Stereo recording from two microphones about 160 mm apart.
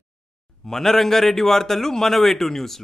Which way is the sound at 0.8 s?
Centre (ahead or behind).